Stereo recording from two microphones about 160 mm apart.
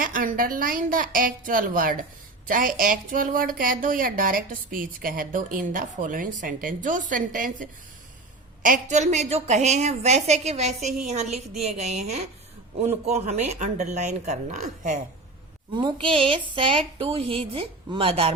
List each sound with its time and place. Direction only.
0.0 s a woman's voice: 55° right (ahead or behind)
15.7 s a woman's voice: 30° right (ahead or behind)